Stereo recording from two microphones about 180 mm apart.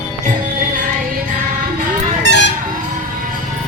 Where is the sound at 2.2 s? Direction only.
75° left (ahead or behind).